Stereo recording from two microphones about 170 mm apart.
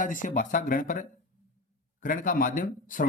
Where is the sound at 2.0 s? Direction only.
50° left (ahead or behind).